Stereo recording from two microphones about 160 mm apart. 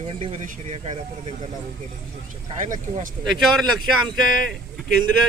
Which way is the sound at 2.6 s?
50° right (ahead or behind).